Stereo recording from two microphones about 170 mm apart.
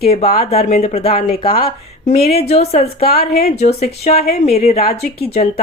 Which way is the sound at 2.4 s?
40° left (ahead or behind).